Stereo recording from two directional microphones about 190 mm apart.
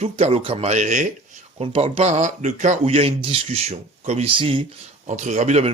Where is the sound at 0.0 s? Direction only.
35° right (ahead or behind).